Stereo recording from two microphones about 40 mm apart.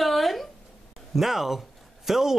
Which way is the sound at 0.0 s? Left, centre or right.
Centre.